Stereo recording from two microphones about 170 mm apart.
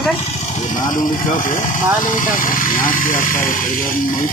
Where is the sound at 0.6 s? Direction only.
50° left (ahead or behind).